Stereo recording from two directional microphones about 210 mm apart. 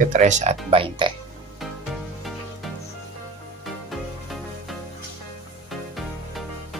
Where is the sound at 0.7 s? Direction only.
25° right (ahead or behind).